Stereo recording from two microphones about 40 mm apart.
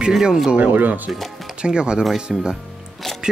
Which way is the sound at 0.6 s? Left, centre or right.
Right.